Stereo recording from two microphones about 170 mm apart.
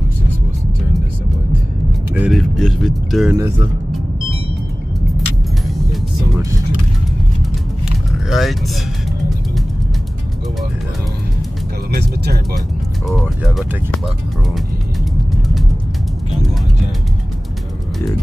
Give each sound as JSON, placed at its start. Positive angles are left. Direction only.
{"t": 2.1, "sound": "speech", "side_deg": -5}
{"t": 3.3, "sound": "speech", "side_deg": -15}
{"t": 8.3, "sound": "speech", "side_deg": 0}
{"t": 11.9, "sound": "music", "side_deg": -65}
{"t": 13.2, "sound": "music", "side_deg": -5}